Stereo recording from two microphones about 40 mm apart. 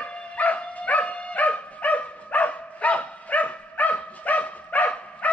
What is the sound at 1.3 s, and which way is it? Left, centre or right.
Dog, left.